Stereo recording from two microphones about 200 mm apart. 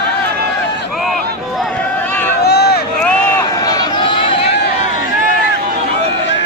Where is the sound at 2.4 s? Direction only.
50° left (ahead or behind).